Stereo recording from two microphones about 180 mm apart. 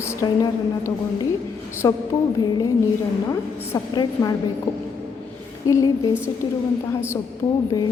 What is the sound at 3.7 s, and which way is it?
Speech, 20° left (ahead or behind).